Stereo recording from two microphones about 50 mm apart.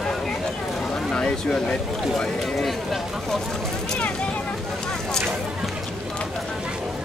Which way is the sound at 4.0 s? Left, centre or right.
Left.